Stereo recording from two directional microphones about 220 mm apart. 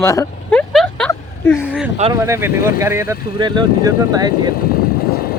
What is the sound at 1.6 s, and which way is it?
Speech, 5° right (ahead or behind).